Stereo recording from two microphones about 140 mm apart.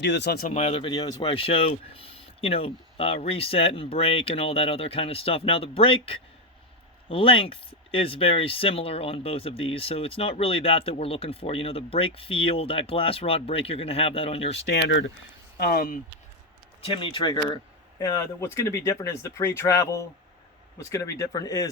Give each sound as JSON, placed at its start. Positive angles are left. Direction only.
{"t": 0.5, "sound": "speech", "side_deg": 50}
{"t": 0.9, "sound": "speech", "side_deg": 30}
{"t": 15.6, "sound": "speech", "side_deg": 90}
{"t": 16.8, "sound": "speech", "side_deg": 40}